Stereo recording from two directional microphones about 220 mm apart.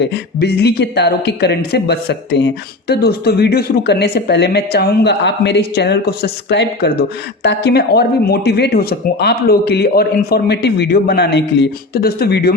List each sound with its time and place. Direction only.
0.0 s speech: 50° left (ahead or behind)